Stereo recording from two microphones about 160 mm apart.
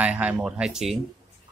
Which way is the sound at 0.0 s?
10° right (ahead or behind).